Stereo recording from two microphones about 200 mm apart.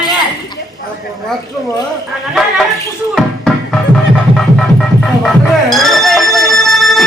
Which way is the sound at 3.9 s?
Centre (ahead or behind).